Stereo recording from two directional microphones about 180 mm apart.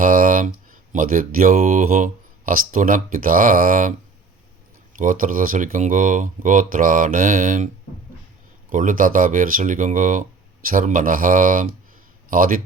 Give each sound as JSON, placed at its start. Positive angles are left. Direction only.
{"t": 0.0, "sound": "speech", "side_deg": -50}
{"t": 4.9, "sound": "speech", "side_deg": -50}
{"t": 8.7, "sound": "speech", "side_deg": -45}